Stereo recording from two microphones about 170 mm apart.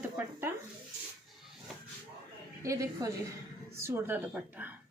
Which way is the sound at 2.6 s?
20° right (ahead or behind).